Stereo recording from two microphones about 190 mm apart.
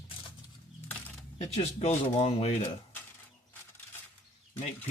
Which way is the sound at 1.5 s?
35° left (ahead or behind).